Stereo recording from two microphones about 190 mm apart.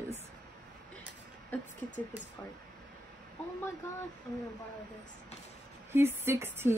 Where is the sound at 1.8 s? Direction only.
40° left (ahead or behind).